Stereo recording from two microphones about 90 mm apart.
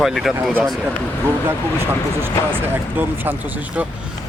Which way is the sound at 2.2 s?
25° right (ahead or behind).